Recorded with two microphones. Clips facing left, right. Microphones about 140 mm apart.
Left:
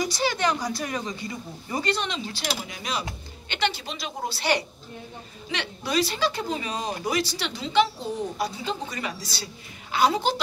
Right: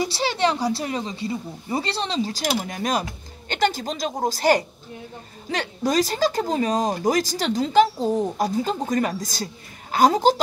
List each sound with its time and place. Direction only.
0.0 s speech: 30° right (ahead or behind)